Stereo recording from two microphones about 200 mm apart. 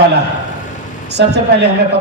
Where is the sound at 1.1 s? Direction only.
55° right (ahead or behind).